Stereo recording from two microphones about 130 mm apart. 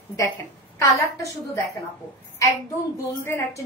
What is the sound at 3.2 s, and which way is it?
Speech, 20° left (ahead or behind).